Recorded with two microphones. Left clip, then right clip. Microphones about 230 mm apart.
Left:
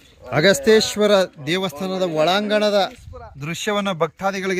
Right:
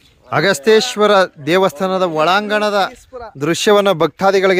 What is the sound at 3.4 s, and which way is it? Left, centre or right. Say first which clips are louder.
Speech: right 11 dB; right.